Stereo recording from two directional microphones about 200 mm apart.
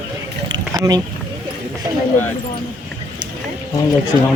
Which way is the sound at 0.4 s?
20° right (ahead or behind).